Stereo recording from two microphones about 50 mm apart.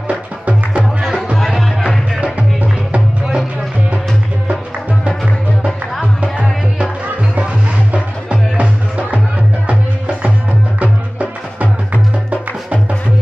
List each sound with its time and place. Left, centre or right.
0.1 s music: right
1.3 s music: centre
7.9 s music: right